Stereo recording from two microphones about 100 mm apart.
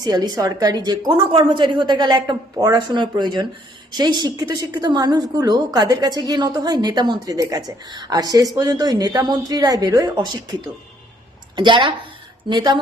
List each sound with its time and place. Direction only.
0.0 s a woman's voice: 40° right (ahead or behind)
1.3 s a woman's voice: 60° right (ahead or behind); by 10.4 s 40° right (ahead or behind)
11.5 s a woman's voice: 50° right (ahead or behind)